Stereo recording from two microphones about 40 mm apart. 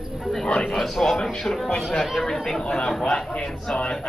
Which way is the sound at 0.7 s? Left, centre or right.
Centre.